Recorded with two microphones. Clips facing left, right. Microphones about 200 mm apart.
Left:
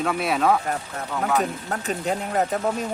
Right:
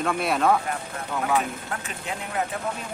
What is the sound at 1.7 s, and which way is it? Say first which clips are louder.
Speech: left 7 dB; 40° left (ahead or behind).